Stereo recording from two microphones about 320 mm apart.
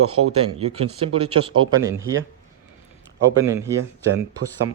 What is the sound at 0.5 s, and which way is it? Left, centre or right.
Speech, centre.